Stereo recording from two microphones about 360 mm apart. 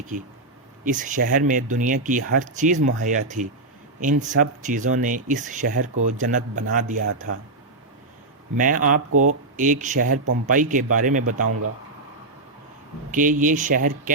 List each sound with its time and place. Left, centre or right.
0.9 s speech: right
8.5 s speech: right
13.1 s speech: right